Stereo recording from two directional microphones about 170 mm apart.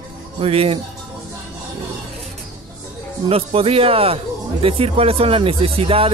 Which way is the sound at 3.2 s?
35° right (ahead or behind).